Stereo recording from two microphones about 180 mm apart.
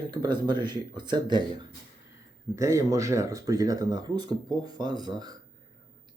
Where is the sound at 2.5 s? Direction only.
15° right (ahead or behind).